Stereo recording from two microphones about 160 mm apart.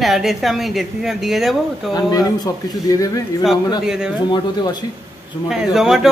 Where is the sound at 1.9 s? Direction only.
25° left (ahead or behind).